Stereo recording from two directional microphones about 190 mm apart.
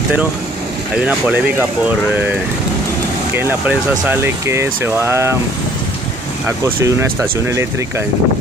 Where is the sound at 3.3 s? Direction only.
10° right (ahead or behind).